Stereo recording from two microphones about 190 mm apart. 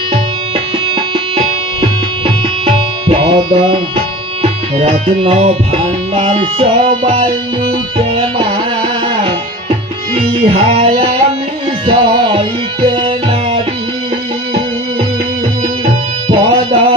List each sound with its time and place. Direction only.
1.8 s tabla: 30° right (ahead or behind)
4.4 s music: 35° right (ahead or behind)
10.2 s music: 30° right (ahead or behind)
15.9 s tabla: 30° right (ahead or behind)